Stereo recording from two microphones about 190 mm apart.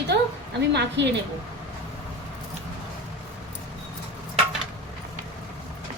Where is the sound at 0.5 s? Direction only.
65° right (ahead or behind).